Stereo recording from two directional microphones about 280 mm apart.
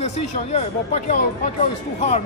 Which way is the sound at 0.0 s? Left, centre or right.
Left.